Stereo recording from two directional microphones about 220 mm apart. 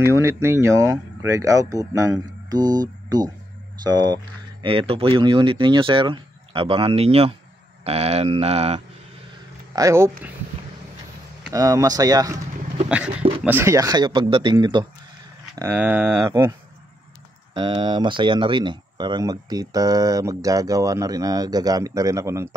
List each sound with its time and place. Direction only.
0.0 s speech: 10° right (ahead or behind); by 8.8 s 30° right (ahead or behind)
9.8 s speech: 15° right (ahead or behind)
11.5 s speech: 15° right (ahead or behind)
12.8 s a sound: 5° right (ahead or behind)
13.4 s speech: 10° right (ahead or behind)
15.5 s speech: 10° right (ahead or behind)
17.6 s speech: 20° right (ahead or behind)